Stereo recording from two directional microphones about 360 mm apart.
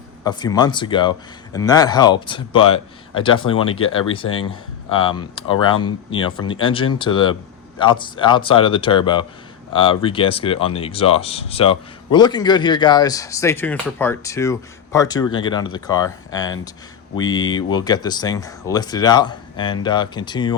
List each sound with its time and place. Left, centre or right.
0.3 s speech: centre
3.7 s speech: left
3.9 s speech: centre